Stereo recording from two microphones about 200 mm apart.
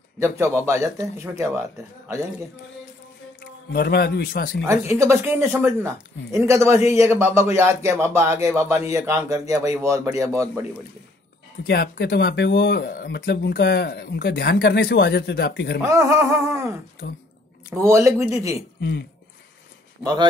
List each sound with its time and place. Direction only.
0.2 s speech: 15° right (ahead or behind)
3.7 s speech: 55° left (ahead or behind)
4.6 s speech: 15° right (ahead or behind)
11.6 s speech: 55° left (ahead or behind)
15.8 s speech: 15° right (ahead or behind)
18.8 s speech: 60° left (ahead or behind)